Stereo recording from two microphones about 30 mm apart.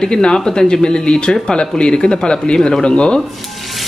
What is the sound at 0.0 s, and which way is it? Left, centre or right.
Speech, left.